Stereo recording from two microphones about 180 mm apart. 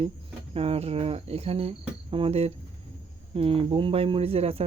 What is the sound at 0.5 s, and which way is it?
Speech, 35° right (ahead or behind).